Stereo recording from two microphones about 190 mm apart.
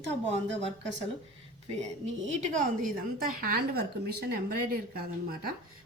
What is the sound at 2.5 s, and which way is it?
Speech, 45° right (ahead or behind).